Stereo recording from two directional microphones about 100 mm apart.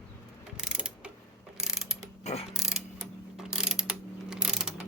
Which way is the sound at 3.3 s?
5° right (ahead or behind).